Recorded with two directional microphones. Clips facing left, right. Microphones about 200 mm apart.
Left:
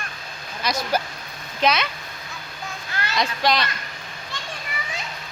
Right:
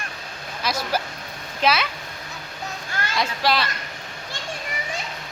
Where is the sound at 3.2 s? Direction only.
5° right (ahead or behind).